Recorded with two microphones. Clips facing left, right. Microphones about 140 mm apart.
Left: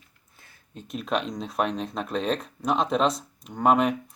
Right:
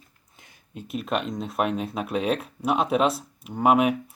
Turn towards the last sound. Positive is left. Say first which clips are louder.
# right 1 dB
turn(degrees=-5)  # may be behind; listen again after turning